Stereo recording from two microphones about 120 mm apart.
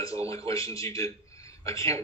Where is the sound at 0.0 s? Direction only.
25° left (ahead or behind).